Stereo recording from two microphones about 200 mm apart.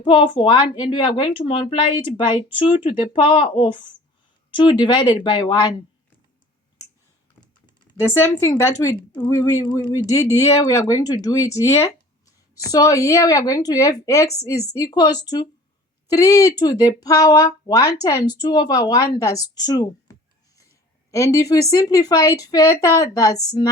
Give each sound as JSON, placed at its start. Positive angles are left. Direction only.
{"t": 0.0, "sound": "speech", "side_deg": 25}
{"t": 7.9, "sound": "a woman's voice", "side_deg": 10}